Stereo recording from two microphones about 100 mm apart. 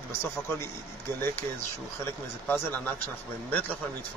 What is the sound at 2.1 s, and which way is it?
A man's voice, 25° left (ahead or behind).